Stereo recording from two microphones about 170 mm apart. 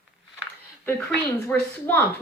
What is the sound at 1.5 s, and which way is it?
Speech, 10° left (ahead or behind).